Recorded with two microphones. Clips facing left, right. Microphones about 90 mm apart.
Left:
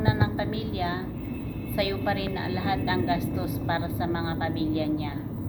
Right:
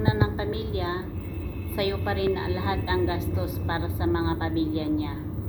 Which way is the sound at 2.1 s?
30° right (ahead or behind).